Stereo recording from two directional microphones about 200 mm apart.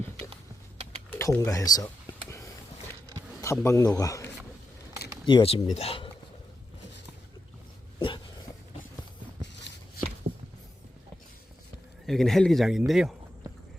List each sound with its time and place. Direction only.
1.1 s a sound: 15° left (ahead or behind)
3.4 s a man's voice: 15° left (ahead or behind)
7.9 s dog: 25° left (ahead or behind)
12.0 s a man's voice: centre (ahead or behind)